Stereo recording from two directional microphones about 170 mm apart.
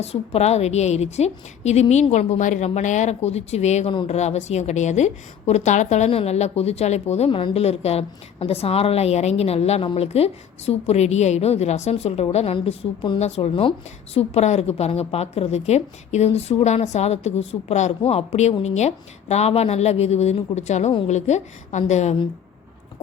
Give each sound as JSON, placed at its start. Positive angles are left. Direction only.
{"t": 0.0, "sound": "a woman's voice", "side_deg": 40}